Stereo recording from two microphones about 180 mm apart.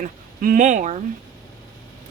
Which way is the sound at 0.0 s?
50° right (ahead or behind).